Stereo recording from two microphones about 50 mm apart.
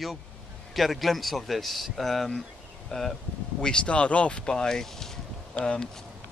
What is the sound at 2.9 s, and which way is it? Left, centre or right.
Speech, centre.